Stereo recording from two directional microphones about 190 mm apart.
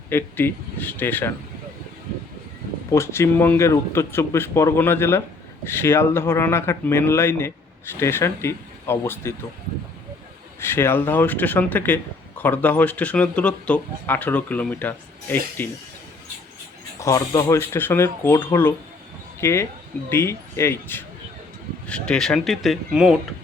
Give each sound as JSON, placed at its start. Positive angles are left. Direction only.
{"t": 0.1, "sound": "speech", "side_deg": 10}
{"t": 2.9, "sound": "speech", "side_deg": 15}
{"t": 10.6, "sound": "speech", "side_deg": 15}
{"t": 17.0, "sound": "speech", "side_deg": 15}